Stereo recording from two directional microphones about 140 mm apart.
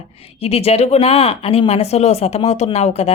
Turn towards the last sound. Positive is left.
turn(degrees=50)  # may be behind; listen again after turning